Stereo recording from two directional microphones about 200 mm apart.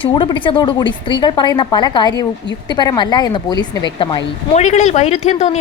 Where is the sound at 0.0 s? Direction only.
25° left (ahead or behind).